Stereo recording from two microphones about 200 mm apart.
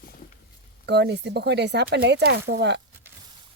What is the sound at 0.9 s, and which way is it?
Speech, 55° right (ahead or behind).